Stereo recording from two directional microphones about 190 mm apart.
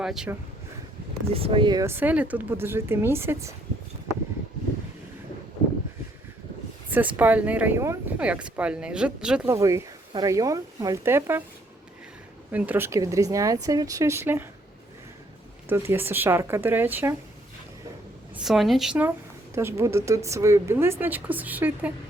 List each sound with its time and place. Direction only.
0.0 s speech: centre (ahead or behind)
1.3 s speech: 30° right (ahead or behind); by 3.5 s 10° right (ahead or behind)
6.9 s speech: 10° right (ahead or behind)
12.5 s speech: 10° right (ahead or behind)
15.7 s speech: 15° right (ahead or behind)
18.3 s speech: centre (ahead or behind)